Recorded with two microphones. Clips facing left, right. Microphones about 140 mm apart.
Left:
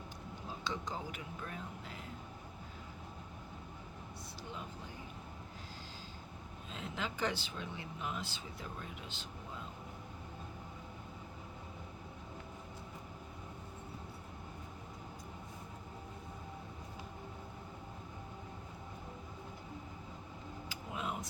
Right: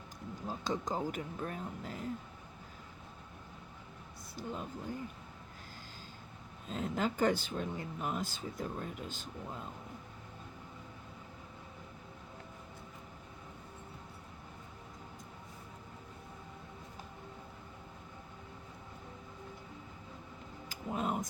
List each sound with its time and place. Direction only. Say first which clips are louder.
0.4 s speech: right 5 dB; 45° right (ahead or behind)
6.7 s speech: right 8 dB; 45° right (ahead or behind)
20.7 s a sound: right 6 dB; 45° right (ahead or behind)